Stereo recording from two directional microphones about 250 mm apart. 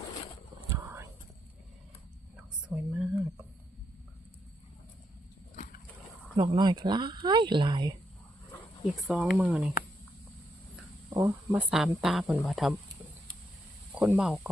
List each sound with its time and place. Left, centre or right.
2.3 s a sound: centre
6.3 s speech: centre
9.0 s speech: centre
11.1 s speech: centre
11.7 s speech: centre
13.9 s speech: centre